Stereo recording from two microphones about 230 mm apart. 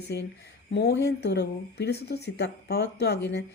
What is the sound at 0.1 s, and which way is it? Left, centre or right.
Speech, left.